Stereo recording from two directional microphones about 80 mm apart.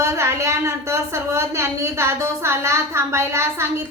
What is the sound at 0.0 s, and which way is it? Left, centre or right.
A woman's voice, right.